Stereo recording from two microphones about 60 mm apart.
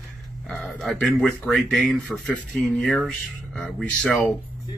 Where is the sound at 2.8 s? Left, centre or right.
Centre.